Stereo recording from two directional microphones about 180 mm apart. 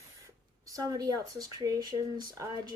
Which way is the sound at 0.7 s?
20° right (ahead or behind).